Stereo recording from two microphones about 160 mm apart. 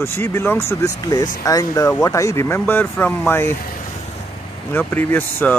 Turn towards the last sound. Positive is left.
turn(degrees=10)  # may be behind; listen again after turning